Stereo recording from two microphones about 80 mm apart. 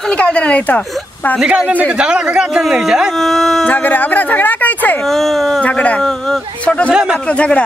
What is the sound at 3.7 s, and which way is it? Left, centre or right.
Speech, left.